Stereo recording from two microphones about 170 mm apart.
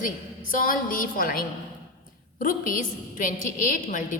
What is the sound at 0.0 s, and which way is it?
A woman's voice, 55° left (ahead or behind).